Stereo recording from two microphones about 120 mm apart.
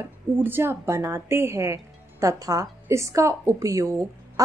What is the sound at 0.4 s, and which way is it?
Speech, 20° right (ahead or behind).